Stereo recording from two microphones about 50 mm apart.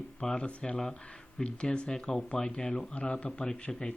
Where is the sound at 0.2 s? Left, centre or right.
Centre.